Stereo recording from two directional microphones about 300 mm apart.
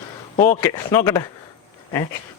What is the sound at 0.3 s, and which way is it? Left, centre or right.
Speech, centre.